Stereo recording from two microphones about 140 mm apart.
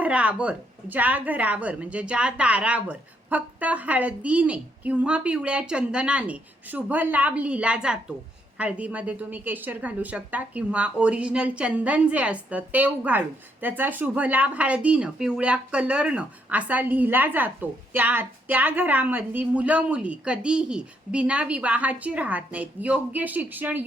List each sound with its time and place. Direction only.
0.0 s a woman's voice: 10° right (ahead or behind)